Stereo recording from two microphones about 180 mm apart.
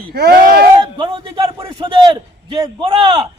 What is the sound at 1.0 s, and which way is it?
A man's voice, 30° right (ahead or behind).